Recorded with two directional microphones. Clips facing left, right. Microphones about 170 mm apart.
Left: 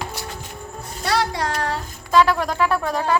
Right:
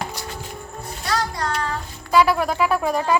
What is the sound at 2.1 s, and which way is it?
Speech, 10° right (ahead or behind).